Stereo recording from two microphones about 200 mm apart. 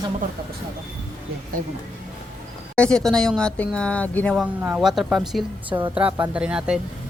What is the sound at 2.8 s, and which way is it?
Speech, 5° left (ahead or behind).